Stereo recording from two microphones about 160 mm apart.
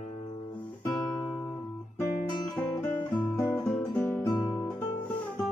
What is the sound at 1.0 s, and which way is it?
Guitar, 20° left (ahead or behind).